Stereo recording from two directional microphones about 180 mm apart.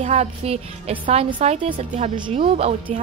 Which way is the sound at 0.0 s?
35° right (ahead or behind).